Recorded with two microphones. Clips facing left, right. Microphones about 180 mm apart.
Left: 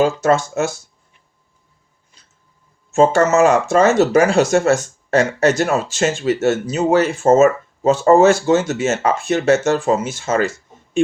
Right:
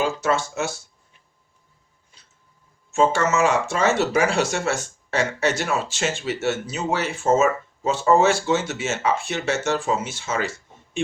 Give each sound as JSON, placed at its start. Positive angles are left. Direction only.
{"t": 0.0, "sound": "speech", "side_deg": 45}
{"t": 2.9, "sound": "speech", "side_deg": 45}